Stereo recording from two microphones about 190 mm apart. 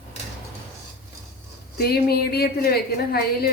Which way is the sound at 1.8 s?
55° left (ahead or behind).